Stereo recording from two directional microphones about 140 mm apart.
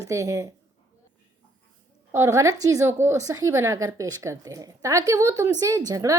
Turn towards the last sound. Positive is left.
turn(degrees=-25)  # may be behind; listen again after turning